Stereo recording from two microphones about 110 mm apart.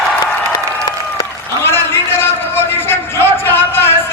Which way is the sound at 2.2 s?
20° left (ahead or behind).